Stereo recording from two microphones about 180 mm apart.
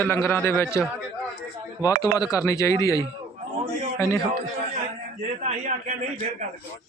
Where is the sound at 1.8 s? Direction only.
20° left (ahead or behind).